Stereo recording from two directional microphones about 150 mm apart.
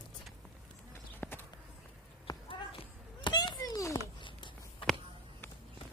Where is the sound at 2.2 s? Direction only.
35° left (ahead or behind).